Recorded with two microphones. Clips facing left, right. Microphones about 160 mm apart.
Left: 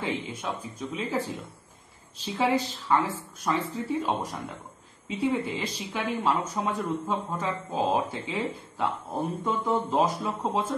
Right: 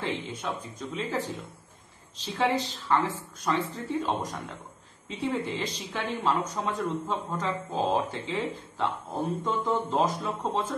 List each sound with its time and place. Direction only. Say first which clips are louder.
0.0 s speech: left 1 dB; 10° left (ahead or behind)
9.4 s speech: left 3 dB; 10° left (ahead or behind)